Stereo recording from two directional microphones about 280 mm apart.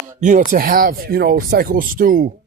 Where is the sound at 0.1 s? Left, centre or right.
Right.